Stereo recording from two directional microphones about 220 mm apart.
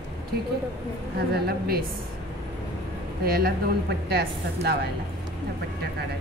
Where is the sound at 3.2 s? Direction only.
45° right (ahead or behind).